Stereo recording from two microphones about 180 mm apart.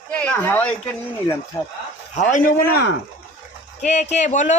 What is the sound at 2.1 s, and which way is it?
Speech, 45° left (ahead or behind).